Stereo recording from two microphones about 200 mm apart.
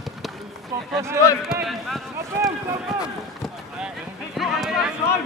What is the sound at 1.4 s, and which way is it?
Speech, centre (ahead or behind).